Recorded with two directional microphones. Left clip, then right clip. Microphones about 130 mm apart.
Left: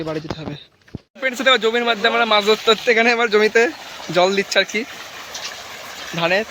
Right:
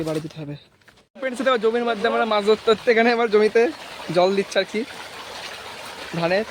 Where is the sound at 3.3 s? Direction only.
5° right (ahead or behind).